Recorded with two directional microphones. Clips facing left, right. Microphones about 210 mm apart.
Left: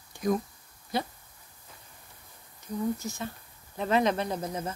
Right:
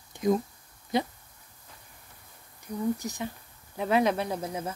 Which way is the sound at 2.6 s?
15° right (ahead or behind).